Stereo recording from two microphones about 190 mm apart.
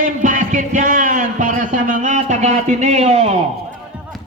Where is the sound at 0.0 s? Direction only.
45° right (ahead or behind).